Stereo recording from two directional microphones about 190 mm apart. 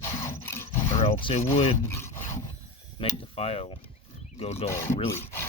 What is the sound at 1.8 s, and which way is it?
Wood, 15° left (ahead or behind).